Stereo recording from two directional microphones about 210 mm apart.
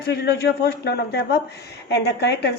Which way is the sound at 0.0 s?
50° left (ahead or behind).